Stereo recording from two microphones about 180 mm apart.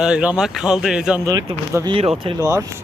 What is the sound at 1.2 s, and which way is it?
Speech, 20° right (ahead or behind).